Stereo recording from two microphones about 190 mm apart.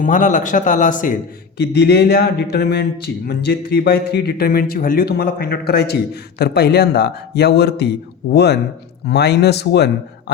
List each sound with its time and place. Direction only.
0.0 s a man's voice: 45° left (ahead or behind)
1.5 s speech: 60° left (ahead or behind)